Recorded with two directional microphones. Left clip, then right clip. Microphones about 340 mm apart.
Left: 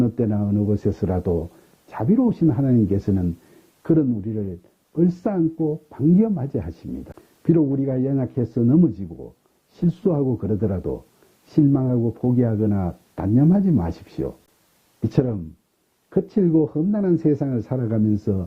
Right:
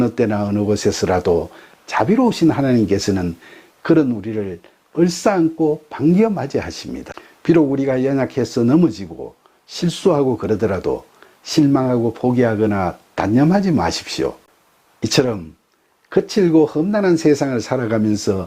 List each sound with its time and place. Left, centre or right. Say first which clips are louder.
0.0 s speech: right 6 dB; centre
5.5 s speech: right 7 dB; right
5.9 s speech: right 5 dB; centre
10.1 s speech: right 7 dB; centre